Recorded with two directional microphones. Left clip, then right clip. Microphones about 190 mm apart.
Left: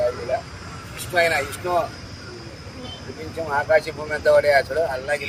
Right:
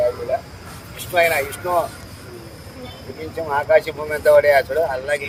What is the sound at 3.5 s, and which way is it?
Speech, 5° right (ahead or behind).